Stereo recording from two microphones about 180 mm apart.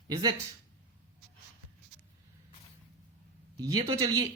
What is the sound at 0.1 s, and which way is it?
Speech, 20° right (ahead or behind).